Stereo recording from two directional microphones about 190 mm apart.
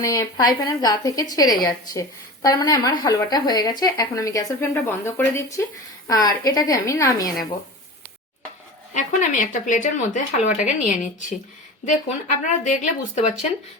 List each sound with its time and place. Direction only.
0.0 s a woman's voice: 15° left (ahead or behind)
8.9 s speech: 40° left (ahead or behind)